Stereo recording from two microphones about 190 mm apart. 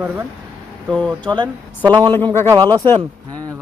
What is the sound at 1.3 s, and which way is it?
A woman's voice, 25° right (ahead or behind).